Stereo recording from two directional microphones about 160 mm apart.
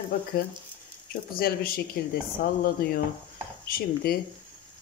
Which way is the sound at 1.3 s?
70° left (ahead or behind).